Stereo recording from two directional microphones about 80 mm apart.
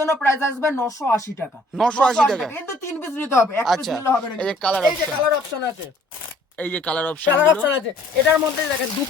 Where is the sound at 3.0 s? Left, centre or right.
Left.